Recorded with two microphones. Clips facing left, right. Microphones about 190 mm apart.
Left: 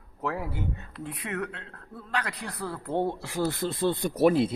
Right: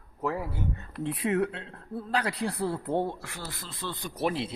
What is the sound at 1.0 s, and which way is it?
Speech, 30° right (ahead or behind).